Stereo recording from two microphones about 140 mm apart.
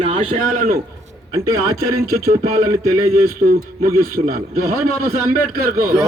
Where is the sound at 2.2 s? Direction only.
90° right.